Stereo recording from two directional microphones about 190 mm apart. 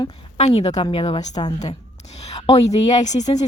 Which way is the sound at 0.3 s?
35° left (ahead or behind).